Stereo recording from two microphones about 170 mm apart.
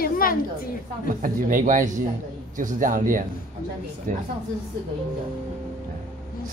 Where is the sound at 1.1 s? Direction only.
50° right (ahead or behind).